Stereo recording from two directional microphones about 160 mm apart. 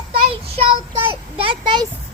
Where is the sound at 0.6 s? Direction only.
30° right (ahead or behind).